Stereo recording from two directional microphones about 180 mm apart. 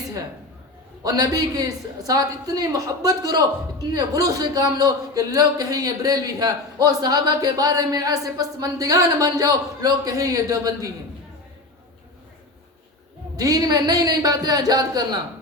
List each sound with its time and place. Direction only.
1.0 s a man's voice: 20° right (ahead or behind)
13.3 s a man's voice: 20° right (ahead or behind)